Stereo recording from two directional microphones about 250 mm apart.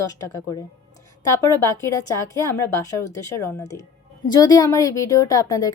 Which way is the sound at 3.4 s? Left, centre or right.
Centre.